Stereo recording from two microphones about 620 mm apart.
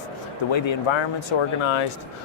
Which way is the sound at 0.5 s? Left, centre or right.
Left.